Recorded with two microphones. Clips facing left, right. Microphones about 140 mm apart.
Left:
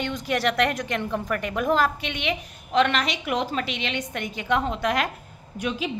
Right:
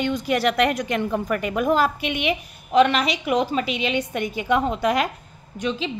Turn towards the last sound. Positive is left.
turn(degrees=10)  # may be behind; listen again after turning